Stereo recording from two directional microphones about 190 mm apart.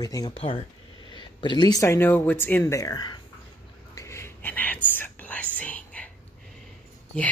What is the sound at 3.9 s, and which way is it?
Whispering, 15° left (ahead or behind).